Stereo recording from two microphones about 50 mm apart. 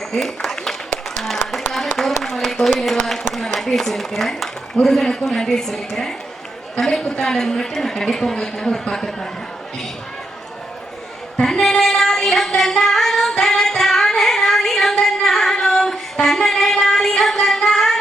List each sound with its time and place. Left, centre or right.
0.1 s a sound: centre
2.7 s speech: centre
11.4 s female singing: centre
13.4 s music: centre
15.6 s female singing: centre
16.2 s a sound: centre
16.6 s music: centre